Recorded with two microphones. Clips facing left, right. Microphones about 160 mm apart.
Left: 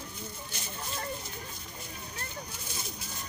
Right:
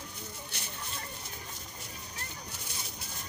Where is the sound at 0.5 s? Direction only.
65° right (ahead or behind).